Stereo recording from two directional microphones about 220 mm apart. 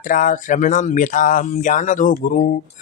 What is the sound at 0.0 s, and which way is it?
Speech, 35° left (ahead or behind).